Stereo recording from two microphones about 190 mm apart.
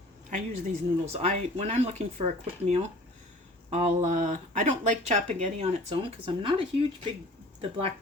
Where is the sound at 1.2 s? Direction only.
35° right (ahead or behind).